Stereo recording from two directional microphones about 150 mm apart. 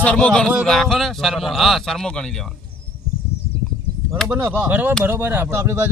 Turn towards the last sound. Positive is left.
turn(degrees=-15)  # may be behind; listen again after turning